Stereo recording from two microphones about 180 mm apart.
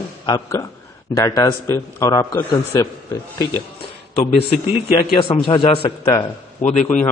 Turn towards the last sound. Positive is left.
turn(degrees=40)  # may be behind; listen again after turning